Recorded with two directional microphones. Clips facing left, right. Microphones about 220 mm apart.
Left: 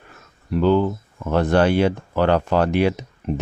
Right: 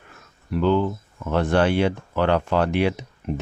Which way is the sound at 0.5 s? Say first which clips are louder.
Left 3 dB; 40° left (ahead or behind).